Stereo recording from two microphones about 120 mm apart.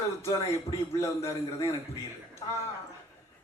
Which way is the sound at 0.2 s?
25° left (ahead or behind).